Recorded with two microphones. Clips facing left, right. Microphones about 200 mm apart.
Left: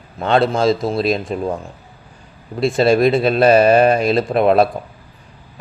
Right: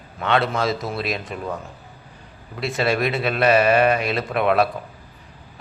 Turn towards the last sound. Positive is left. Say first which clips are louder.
# left 6 dB
turn(degrees=30)  # may be behind; listen again after turning